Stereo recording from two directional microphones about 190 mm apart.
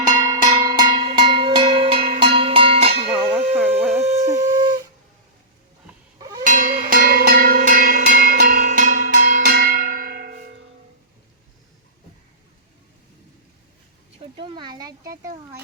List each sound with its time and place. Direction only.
0.1 s cowbell: 20° right (ahead or behind)
2.1 s music: 30° right (ahead or behind)
3.1 s cowbell: centre (ahead or behind)
3.5 s wind instrument: 10° right (ahead or behind)
6.4 s music: 45° right (ahead or behind)
9.5 s church bell: 50° right (ahead or behind)
14.2 s a sound: 25° right (ahead or behind)